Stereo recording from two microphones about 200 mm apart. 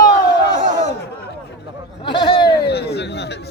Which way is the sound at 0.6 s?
40° right (ahead or behind).